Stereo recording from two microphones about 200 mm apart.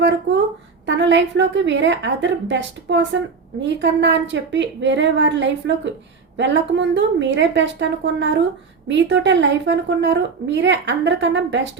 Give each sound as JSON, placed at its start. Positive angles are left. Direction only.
{"t": 0.9, "sound": "a woman's voice", "side_deg": -65}